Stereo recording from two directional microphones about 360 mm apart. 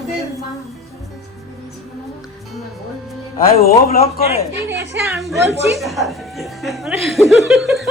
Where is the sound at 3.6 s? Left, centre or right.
Left.